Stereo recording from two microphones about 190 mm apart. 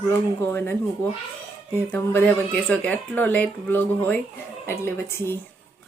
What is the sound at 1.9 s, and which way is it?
Speech, 10° left (ahead or behind).